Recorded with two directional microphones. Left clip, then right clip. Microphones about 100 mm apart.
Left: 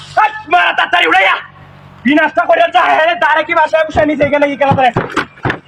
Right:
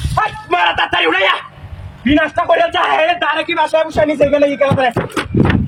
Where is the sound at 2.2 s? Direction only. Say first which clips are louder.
Left 4 dB; centre (ahead or behind).